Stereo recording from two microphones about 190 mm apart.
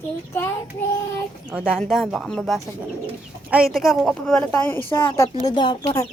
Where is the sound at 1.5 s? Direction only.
5° right (ahead or behind); by 5.0 s 10° left (ahead or behind).